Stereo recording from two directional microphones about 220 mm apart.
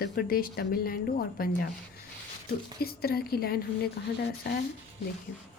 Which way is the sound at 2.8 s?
45° left (ahead or behind).